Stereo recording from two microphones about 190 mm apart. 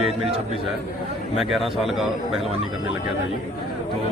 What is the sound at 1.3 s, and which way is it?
Speech, centre (ahead or behind).